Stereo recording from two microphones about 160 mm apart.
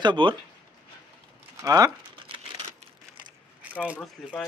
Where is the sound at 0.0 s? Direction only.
30° right (ahead or behind).